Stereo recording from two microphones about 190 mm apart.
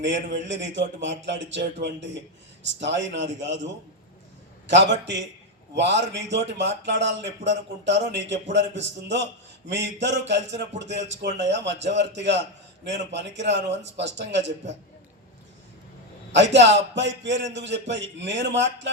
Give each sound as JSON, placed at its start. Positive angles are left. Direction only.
{"t": 0.0, "sound": "speech", "side_deg": -70}
{"t": 4.6, "sound": "speech", "side_deg": -70}
{"t": 16.3, "sound": "speech", "side_deg": -70}